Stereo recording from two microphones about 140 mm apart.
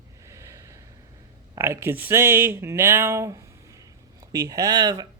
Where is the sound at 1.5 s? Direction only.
20° right (ahead or behind).